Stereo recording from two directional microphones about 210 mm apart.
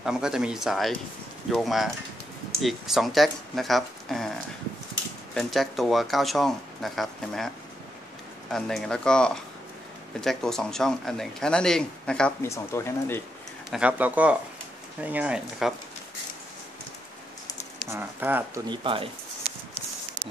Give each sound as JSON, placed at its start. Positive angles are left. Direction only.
{"t": 0.0, "sound": "speech", "side_deg": -5}
{"t": 5.3, "sound": "speech", "side_deg": 0}
{"t": 13.7, "sound": "speech", "side_deg": -5}
{"t": 17.8, "sound": "speech", "side_deg": -10}
{"t": 18.7, "sound": "speech", "side_deg": -25}